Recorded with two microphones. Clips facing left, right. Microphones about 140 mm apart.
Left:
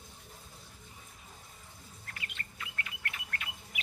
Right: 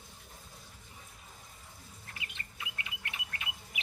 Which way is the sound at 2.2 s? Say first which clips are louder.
Left 1 dB; 20° right (ahead or behind).